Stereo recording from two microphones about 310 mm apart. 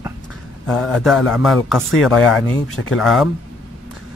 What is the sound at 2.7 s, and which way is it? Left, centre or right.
Speech, left.